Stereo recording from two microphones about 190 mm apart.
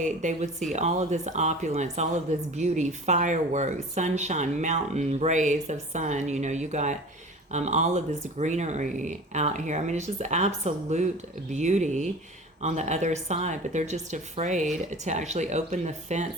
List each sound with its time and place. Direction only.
0.0 s speech: 40° right (ahead or behind)